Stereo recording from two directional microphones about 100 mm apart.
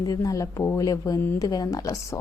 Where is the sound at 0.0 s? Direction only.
35° left (ahead or behind).